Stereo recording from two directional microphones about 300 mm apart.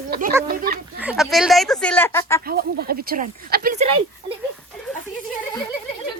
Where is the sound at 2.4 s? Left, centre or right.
Right.